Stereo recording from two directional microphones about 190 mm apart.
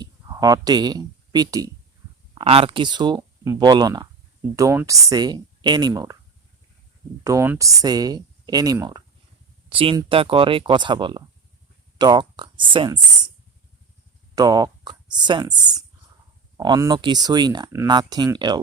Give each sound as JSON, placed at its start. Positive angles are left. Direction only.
{"t": 0.0, "sound": "speech", "side_deg": -20}
{"t": 2.3, "sound": "speech", "side_deg": -30}
{"t": 7.3, "sound": "speech", "side_deg": -15}
{"t": 14.3, "sound": "speech", "side_deg": -20}